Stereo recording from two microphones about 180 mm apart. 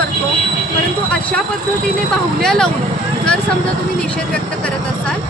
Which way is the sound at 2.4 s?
5° left (ahead or behind).